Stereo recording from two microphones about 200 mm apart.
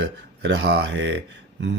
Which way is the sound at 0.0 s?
60° right (ahead or behind).